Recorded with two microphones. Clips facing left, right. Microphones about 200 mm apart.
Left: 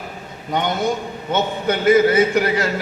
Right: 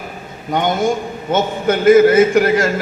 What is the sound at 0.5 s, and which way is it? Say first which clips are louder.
A man's voice: right 4 dB; 50° right (ahead or behind).